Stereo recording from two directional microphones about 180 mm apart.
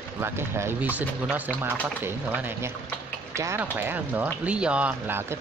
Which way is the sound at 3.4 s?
15° right (ahead or behind).